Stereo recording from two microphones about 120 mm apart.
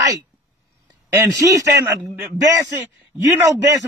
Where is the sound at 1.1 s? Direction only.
25° right (ahead or behind).